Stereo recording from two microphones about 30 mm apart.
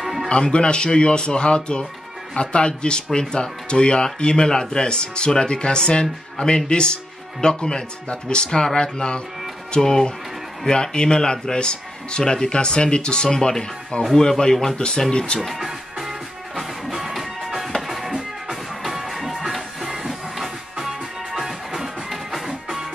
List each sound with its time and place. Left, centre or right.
0.0 s music: centre
0.3 s speech: left
9.8 s speech: centre
10.7 s speech: left
12.4 s speech: left
13.3 s speech: centre
13.9 s speech: left
14.5 s speech: centre
15.4 s music: centre